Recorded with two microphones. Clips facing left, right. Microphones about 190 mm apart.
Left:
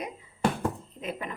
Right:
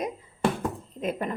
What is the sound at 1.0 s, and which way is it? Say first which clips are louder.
Speech: right 7 dB; 45° right (ahead or behind).